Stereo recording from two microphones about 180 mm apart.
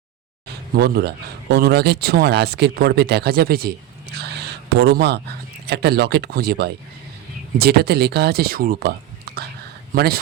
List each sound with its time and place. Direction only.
0.4 s speech: 60° right (ahead or behind)
4.1 s a sound: 65° right (ahead or behind)
5.6 s speech: 65° right (ahead or behind)